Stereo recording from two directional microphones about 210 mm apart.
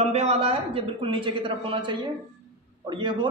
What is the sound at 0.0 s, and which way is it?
A man's voice, 30° right (ahead or behind).